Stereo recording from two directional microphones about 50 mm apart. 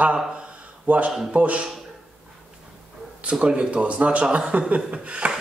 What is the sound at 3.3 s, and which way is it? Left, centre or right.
Speech, centre.